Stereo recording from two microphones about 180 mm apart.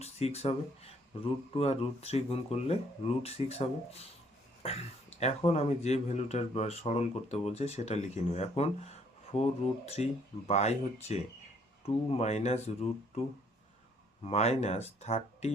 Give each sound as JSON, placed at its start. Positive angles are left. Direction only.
{"t": 0.0, "sound": "speech", "side_deg": 35}
{"t": 4.6, "sound": "a sound", "side_deg": 35}
{"t": 5.5, "sound": "speech", "side_deg": 35}
{"t": 14.3, "sound": "speech", "side_deg": 35}